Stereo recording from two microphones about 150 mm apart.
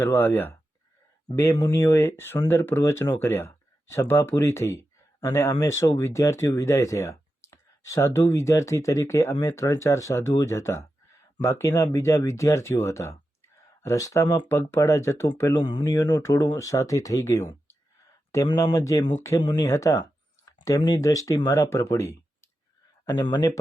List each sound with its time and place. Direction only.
0.0 s speech: 15° left (ahead or behind)
15.6 s speech: 30° left (ahead or behind)
23.0 s speech: 30° left (ahead or behind)